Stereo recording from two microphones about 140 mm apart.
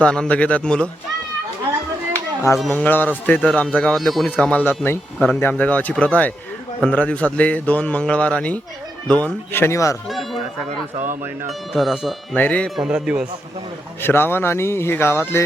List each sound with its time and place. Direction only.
0.0 s a man's voice: 10° left (ahead or behind)
2.6 s a man's voice: 10° left (ahead or behind)
10.1 s a sound: centre (ahead or behind)
11.7 s a man's voice: centre (ahead or behind)
12.4 s a man's voice: 10° left (ahead or behind); by 13.2 s 5° right (ahead or behind)
14.0 s a man's voice: 15° left (ahead or behind)